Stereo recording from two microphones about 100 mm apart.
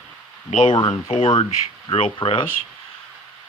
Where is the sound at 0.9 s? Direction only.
90° left; by 2.5 s 60° left (ahead or behind).